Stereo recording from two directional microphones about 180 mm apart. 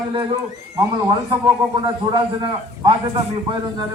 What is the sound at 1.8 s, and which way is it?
Speech, 25° right (ahead or behind).